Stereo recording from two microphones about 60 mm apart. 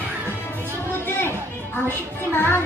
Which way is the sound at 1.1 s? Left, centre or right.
Left.